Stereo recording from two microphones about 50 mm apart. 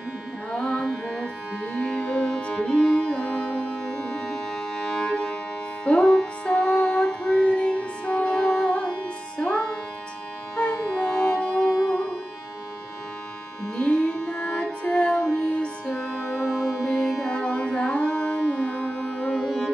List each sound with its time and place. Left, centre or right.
0.5 s music: left
0.8 s music: centre
1.6 s music: left
13.7 s music: left
16.4 s music: centre; by 19.1 s left
19.2 s music: centre